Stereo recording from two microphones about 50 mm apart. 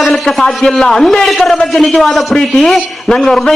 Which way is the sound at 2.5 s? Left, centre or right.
Centre.